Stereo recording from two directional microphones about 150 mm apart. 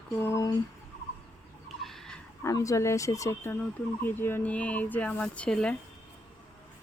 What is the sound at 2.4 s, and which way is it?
Speech, 20° left (ahead or behind).